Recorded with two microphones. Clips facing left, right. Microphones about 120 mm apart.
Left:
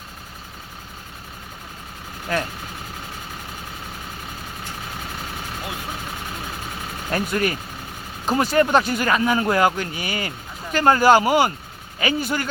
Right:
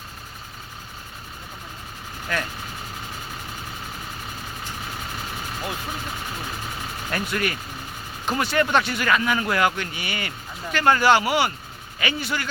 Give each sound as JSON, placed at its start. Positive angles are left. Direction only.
{"t": 2.3, "sound": "speech", "side_deg": 35}
{"t": 7.1, "sound": "a man's voice", "side_deg": 35}